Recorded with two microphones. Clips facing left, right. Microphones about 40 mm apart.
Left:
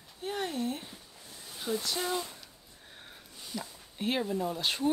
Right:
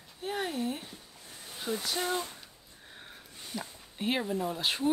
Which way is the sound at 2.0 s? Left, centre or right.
Right.